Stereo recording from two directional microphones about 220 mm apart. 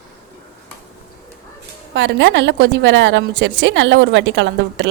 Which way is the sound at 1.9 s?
55° right (ahead or behind).